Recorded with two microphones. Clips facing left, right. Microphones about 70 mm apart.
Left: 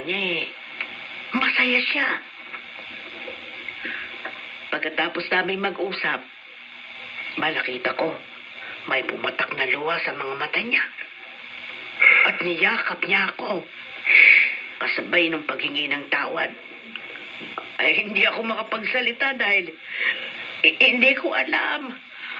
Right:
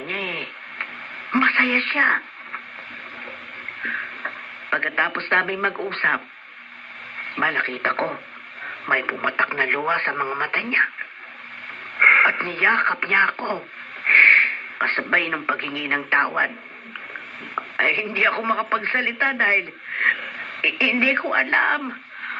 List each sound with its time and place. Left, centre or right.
0.1 s speech: right
3.8 s speech: right
11.9 s speech: right